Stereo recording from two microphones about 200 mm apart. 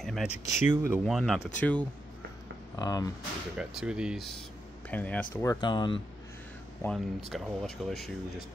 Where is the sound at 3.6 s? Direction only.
5° right (ahead or behind).